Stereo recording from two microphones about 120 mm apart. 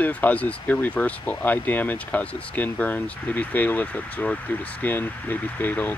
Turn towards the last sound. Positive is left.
turn(degrees=15)  # may be behind; listen again after turning